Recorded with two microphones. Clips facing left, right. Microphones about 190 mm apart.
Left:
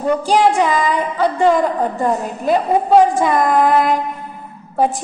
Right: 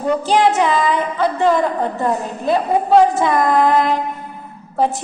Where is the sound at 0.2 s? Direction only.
10° left (ahead or behind).